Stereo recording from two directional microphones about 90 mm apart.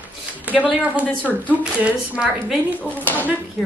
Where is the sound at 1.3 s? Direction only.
Centre (ahead or behind).